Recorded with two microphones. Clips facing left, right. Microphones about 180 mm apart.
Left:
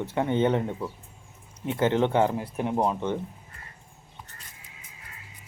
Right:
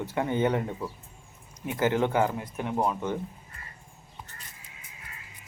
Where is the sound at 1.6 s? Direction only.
25° left (ahead or behind).